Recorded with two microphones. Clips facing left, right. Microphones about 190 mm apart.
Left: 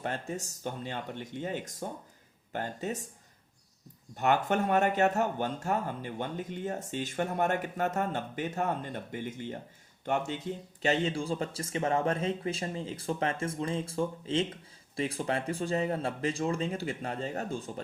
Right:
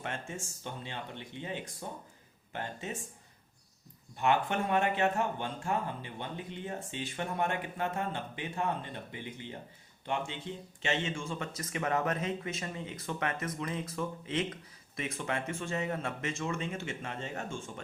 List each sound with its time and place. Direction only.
0.0 s speech: 40° left (ahead or behind)
4.2 s speech: 45° left (ahead or behind)